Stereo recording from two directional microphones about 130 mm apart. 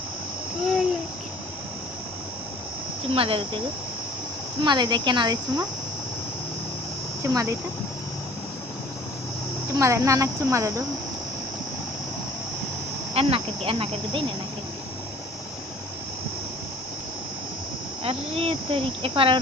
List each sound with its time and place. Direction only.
3.1 s speech: 45° right (ahead or behind)
4.6 s speech: 35° right (ahead or behind)
7.2 s speech: 25° right (ahead or behind)
9.7 s speech: 25° right (ahead or behind)
13.1 s speech: 45° right (ahead or behind)
18.0 s speech: 45° right (ahead or behind)